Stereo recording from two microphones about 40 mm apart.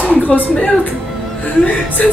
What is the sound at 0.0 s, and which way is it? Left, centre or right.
Speech, left.